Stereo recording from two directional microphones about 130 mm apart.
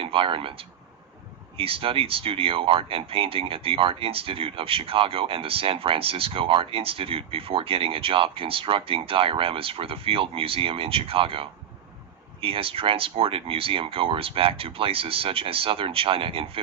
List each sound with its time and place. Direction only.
0.0 s speech: 45° right (ahead or behind)